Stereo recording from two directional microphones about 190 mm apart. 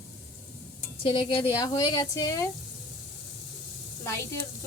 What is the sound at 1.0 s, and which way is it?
A woman's voice, 30° left (ahead or behind).